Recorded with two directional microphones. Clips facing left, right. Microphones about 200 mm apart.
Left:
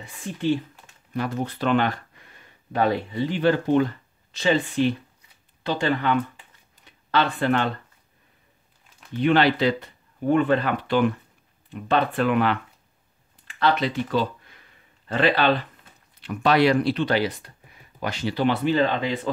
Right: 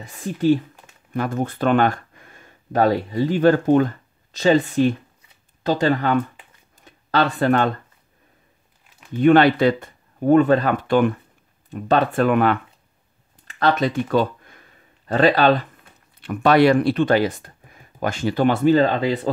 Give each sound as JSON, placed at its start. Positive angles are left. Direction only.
{"t": 0.0, "sound": "speech", "side_deg": -40}
{"t": 6.8, "sound": "a sound", "side_deg": -40}
{"t": 9.2, "sound": "speech", "side_deg": -50}